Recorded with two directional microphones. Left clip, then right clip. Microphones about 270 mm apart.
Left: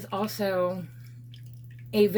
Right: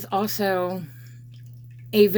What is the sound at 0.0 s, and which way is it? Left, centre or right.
Speech, right.